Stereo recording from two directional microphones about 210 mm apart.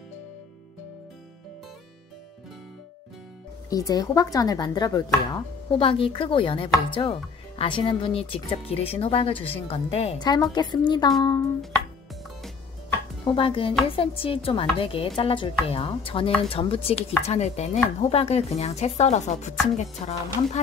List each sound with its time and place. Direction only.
3.7 s speech: 15° left (ahead or behind)
13.2 s speech: 25° left (ahead or behind)